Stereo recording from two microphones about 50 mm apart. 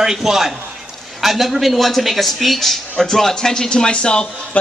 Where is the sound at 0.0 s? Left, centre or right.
Centre.